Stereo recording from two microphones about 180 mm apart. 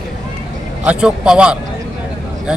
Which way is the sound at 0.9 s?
5° right (ahead or behind).